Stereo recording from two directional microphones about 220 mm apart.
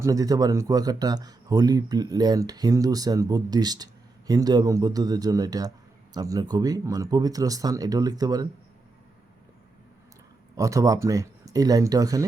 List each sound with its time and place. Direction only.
0.0 s speech: 15° right (ahead or behind)
10.5 s speech: 15° right (ahead or behind)